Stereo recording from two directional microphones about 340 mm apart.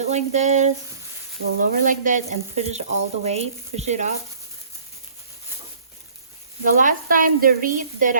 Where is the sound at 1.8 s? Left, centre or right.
Right.